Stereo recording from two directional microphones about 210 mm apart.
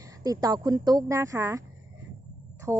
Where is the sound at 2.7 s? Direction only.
10° right (ahead or behind).